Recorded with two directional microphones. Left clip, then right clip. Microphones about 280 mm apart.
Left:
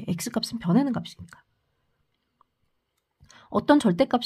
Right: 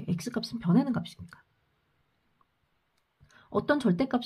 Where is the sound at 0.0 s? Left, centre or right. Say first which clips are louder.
Left 5 dB; left.